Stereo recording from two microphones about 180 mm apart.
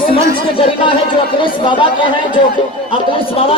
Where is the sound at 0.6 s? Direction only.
30° left (ahead or behind).